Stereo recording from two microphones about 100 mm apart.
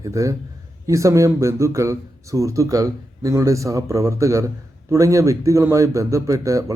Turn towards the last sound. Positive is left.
turn(degrees=-35)  # may be behind; listen again after turning